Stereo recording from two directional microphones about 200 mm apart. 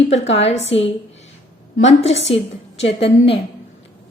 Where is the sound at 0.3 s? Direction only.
30° left (ahead or behind).